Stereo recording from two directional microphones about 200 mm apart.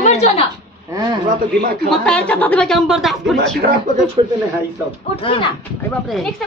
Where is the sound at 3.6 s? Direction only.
45° right (ahead or behind).